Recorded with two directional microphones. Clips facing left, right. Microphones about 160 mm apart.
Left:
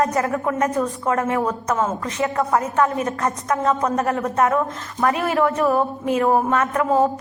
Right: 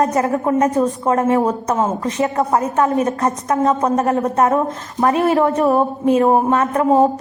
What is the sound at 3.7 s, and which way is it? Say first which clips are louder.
A woman's voice: right 3 dB; 35° right (ahead or behind).